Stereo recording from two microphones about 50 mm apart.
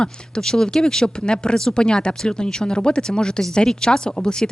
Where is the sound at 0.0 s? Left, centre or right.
Centre.